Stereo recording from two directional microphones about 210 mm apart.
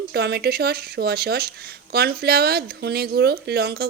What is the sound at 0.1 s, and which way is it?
Speech, 50° right (ahead or behind).